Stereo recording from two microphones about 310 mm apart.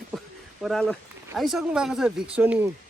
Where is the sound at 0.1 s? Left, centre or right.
Centre.